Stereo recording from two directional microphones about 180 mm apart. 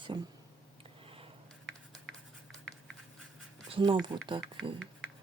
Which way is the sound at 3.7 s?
25° right (ahead or behind).